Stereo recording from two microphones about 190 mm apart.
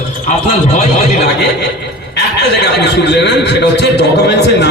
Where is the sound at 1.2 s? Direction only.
65° left (ahead or behind).